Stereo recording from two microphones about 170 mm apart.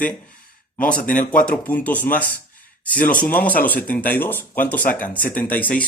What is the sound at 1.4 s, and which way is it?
Speech, 10° left (ahead or behind).